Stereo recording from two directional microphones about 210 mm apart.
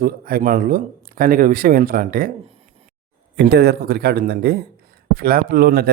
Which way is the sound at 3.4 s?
50° right (ahead or behind).